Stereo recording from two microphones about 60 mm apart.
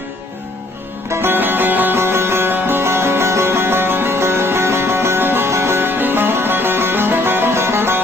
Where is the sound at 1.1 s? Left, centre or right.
Right.